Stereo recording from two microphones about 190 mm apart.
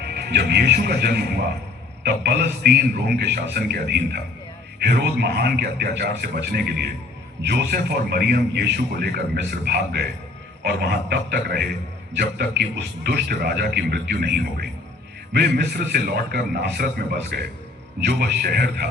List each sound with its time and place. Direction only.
0.0 s a man's voice: 60° right (ahead or behind)